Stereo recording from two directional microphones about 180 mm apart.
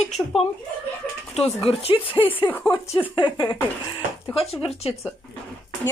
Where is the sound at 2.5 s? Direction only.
10° left (ahead or behind).